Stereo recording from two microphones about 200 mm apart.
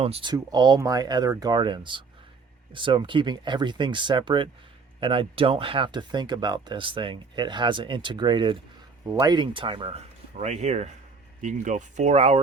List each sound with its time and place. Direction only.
0.0 s speech: 25° right (ahead or behind)